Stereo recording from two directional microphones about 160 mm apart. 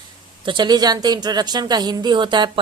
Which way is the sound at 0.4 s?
30° right (ahead or behind).